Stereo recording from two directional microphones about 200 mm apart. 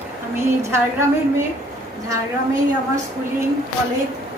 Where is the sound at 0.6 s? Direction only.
15° right (ahead or behind).